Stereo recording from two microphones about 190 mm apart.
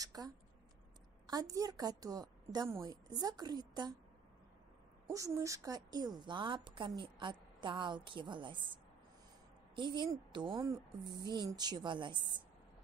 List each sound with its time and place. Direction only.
0.0 s speech: 20° right (ahead or behind)
1.3 s a woman's voice: 20° right (ahead or behind)
5.1 s a woman's voice: 15° right (ahead or behind)
9.8 s a woman's voice: 25° right (ahead or behind)